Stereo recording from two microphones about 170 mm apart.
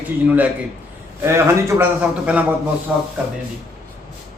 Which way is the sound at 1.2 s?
15° right (ahead or behind).